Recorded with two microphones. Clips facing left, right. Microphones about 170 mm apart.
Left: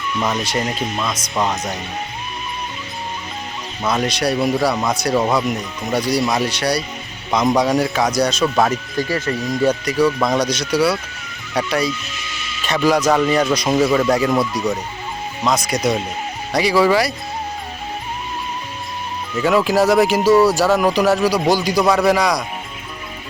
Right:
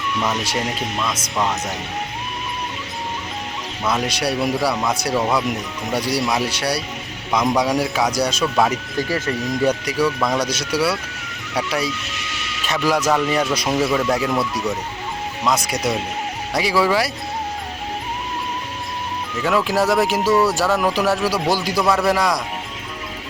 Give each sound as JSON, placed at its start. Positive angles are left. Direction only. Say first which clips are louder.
{"t": 0.3, "sound": "speech", "louder": "left 4 dB", "side_deg": -5}
{"t": 4.0, "sound": "speech", "louder": "left 3 dB", "side_deg": -10}
{"t": 10.2, "sound": "speech", "louder": "left 3 dB", "side_deg": 10}
{"t": 10.4, "sound": "speech", "louder": "left 3 dB", "side_deg": -5}
{"t": 12.1, "sound": "music", "louder": "right 1 dB", "side_deg": -75}
{"t": 12.6, "sound": "speech", "louder": "left 3 dB", "side_deg": -5}
{"t": 15.4, "sound": "speech", "louder": "left 3 dB", "side_deg": -5}
{"t": 19.4, "sound": "speech", "louder": "left 4 dB", "side_deg": 0}